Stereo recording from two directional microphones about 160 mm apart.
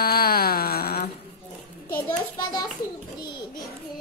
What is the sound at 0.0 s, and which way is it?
Music, 75° left (ahead or behind).